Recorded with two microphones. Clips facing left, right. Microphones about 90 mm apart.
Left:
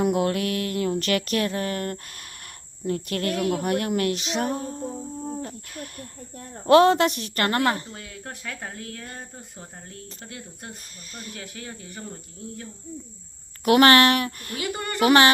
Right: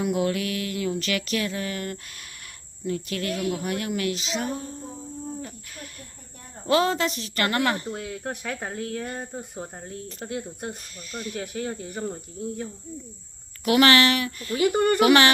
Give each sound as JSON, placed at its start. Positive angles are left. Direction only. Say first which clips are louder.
{"t": 0.0, "sound": "mantra", "louder": "left 2 dB", "side_deg": 50}
{"t": 6.7, "sound": "a woman's voice", "louder": "left 6 dB", "side_deg": 55}
{"t": 7.4, "sound": "speech", "louder": "left 1 dB", "side_deg": 35}
{"t": 7.9, "sound": "speech", "louder": "right 7 dB", "side_deg": -20}
{"t": 11.1, "sound": "speech", "louder": "right 6 dB", "side_deg": 40}
{"t": 11.3, "sound": "speech", "louder": "right 11 dB", "side_deg": -30}
{"t": 13.7, "sound": "mantra", "louder": "left 3 dB", "side_deg": 45}
{"t": 14.6, "sound": "speech", "louder": "right 10 dB", "side_deg": -25}
{"t": 15.0, "sound": "speech", "louder": "left 2 dB", "side_deg": 35}